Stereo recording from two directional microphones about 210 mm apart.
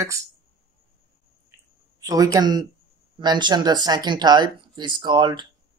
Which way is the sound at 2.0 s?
15° right (ahead or behind).